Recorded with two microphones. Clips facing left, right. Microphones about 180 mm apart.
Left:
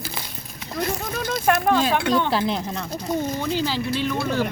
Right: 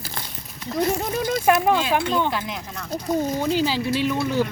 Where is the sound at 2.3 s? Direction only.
35° left (ahead or behind).